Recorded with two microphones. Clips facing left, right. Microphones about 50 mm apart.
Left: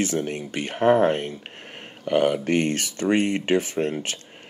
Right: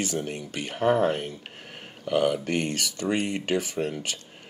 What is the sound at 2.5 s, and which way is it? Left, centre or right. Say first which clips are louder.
Speech: left 5 dB; left.